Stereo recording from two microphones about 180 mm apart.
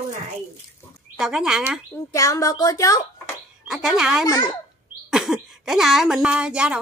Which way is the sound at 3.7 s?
5° right (ahead or behind).